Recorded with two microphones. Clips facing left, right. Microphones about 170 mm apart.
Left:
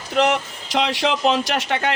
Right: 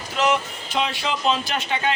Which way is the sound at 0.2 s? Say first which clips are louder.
Left 3 dB; 70° left (ahead or behind).